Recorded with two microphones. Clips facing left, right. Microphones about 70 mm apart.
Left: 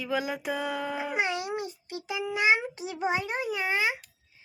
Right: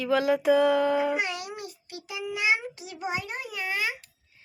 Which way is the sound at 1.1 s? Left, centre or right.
Left.